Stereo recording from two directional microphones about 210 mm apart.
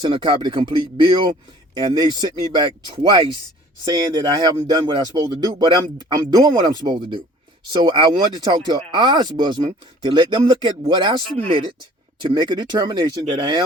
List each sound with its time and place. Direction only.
0.0 s speech: 25° right (ahead or behind)